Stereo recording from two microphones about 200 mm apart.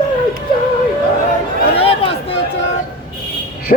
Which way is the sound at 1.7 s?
30° left (ahead or behind).